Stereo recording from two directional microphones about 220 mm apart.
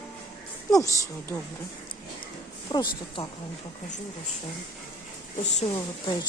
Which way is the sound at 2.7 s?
20° left (ahead or behind).